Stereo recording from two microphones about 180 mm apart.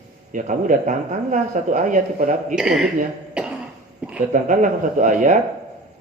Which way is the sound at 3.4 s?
5° right (ahead or behind).